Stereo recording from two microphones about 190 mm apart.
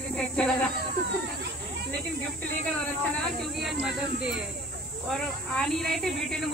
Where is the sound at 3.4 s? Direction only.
Centre (ahead or behind).